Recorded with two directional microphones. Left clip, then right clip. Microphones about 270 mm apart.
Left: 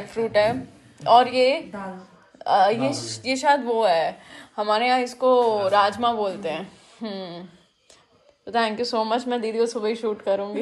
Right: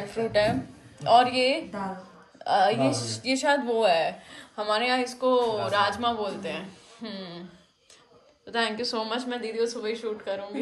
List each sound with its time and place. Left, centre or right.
0.1 s a woman's voice: centre
8.5 s a woman's voice: centre